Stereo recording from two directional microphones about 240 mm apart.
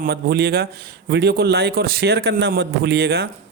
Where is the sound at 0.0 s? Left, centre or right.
Right.